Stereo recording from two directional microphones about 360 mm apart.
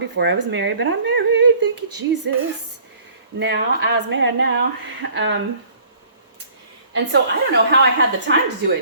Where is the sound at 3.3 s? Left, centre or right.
Right.